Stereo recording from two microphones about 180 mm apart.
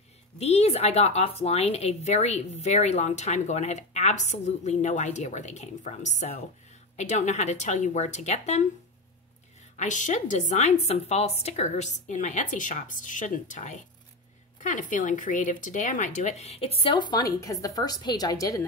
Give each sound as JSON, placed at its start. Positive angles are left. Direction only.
{"t": 0.4, "sound": "speech", "side_deg": 35}
{"t": 9.8, "sound": "a woman's voice", "side_deg": 45}